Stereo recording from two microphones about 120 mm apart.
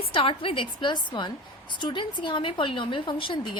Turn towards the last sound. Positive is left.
turn(degrees=45)  # may be behind; listen again after turning